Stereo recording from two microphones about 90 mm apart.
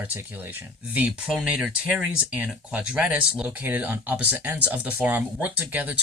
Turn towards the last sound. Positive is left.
turn(degrees=-20)  # may be behind; listen again after turning